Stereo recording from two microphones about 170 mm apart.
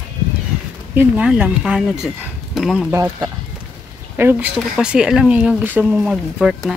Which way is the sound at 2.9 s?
15° right (ahead or behind).